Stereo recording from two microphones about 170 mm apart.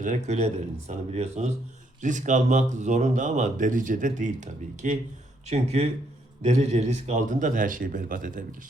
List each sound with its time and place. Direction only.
0.0 s speech: 45° right (ahead or behind)